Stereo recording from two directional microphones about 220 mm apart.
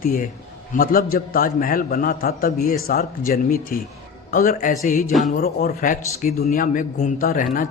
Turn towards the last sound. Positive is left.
turn(degrees=35)  # may be behind; listen again after turning